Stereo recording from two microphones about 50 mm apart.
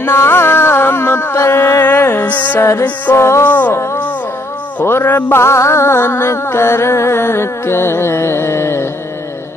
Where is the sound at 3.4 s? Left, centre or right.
Left.